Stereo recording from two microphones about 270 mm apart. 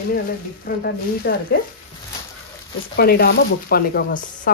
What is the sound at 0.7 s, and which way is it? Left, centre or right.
Speech, left.